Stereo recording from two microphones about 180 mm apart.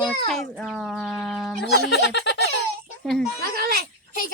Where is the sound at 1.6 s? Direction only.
70° left (ahead or behind).